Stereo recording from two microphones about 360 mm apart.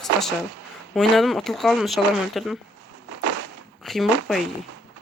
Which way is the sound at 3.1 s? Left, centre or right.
Right.